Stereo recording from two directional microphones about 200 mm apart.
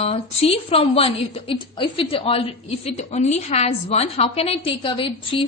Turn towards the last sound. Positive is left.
turn(degrees=25)  # may be behind; listen again after turning